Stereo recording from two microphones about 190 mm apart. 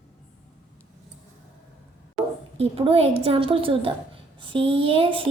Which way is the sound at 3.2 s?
30° right (ahead or behind).